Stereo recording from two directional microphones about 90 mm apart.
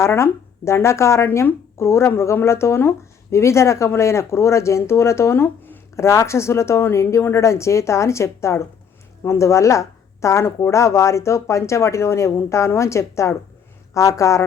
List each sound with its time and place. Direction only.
0.0 s speech: 30° left (ahead or behind)